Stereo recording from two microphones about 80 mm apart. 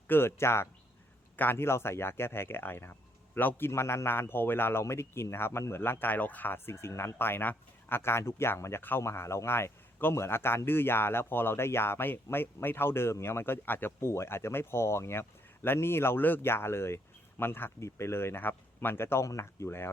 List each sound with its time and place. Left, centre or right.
0.1 s speech: left
19.2 s speech: left